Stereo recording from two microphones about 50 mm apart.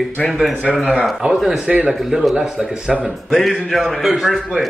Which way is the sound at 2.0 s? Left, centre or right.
Centre.